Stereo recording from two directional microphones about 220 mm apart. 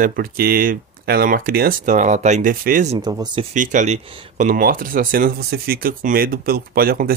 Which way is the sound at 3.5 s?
35° right (ahead or behind).